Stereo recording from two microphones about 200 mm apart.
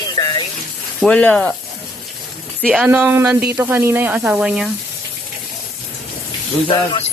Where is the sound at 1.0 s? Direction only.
5° left (ahead or behind).